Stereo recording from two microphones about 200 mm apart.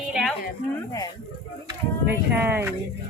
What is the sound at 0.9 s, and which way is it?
Speech, 20° left (ahead or behind).